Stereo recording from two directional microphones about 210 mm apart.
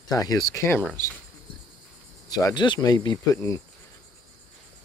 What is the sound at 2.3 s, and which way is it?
Speech, 20° left (ahead or behind).